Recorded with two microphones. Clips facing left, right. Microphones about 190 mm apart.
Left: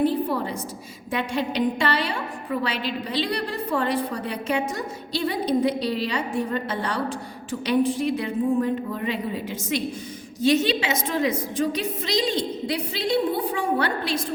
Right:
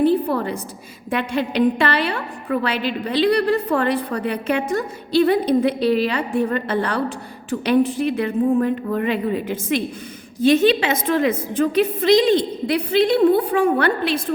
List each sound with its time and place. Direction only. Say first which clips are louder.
0.3 s a woman's voice: right 4 dB; 60° right (ahead or behind)